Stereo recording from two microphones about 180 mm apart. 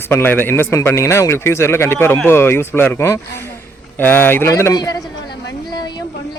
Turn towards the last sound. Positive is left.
turn(degrees=20)  # may be behind; listen again after turning